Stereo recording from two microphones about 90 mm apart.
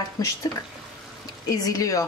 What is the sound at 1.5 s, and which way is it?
Speech, 40° left (ahead or behind).